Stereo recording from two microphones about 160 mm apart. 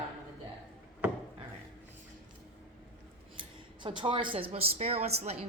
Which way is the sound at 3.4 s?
30° right (ahead or behind).